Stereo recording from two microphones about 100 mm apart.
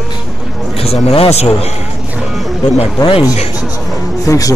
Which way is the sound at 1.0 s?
85° left.